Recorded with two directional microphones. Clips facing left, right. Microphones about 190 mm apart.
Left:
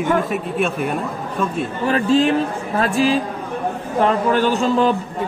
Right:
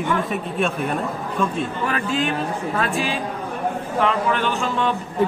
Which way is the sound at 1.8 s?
35° left (ahead or behind).